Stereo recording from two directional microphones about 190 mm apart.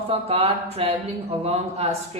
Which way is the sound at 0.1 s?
30° right (ahead or behind).